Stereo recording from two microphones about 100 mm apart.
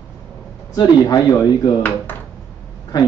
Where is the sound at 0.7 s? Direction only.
45° left (ahead or behind).